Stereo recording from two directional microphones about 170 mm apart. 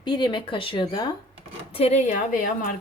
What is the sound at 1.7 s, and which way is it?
Speech, 40° left (ahead or behind).